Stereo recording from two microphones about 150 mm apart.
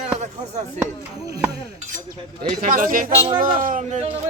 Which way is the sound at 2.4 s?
70° right (ahead or behind).